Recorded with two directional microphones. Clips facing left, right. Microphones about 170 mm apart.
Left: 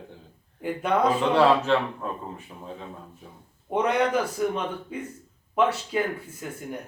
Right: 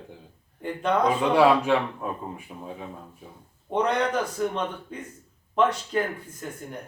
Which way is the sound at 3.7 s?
5° left (ahead or behind).